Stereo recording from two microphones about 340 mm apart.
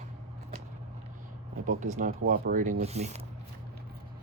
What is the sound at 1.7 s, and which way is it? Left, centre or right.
Speech, right.